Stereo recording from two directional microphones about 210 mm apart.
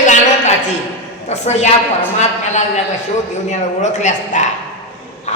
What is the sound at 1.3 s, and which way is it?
A man's voice, 30° left (ahead or behind).